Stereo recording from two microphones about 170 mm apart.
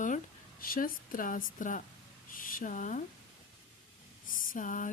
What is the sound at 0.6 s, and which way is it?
Speech, 55° left (ahead or behind).